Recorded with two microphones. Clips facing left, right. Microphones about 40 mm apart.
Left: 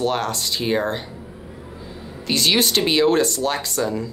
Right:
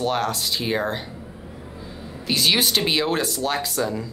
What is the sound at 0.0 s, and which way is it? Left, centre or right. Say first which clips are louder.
Speech: left 1 dB; centre.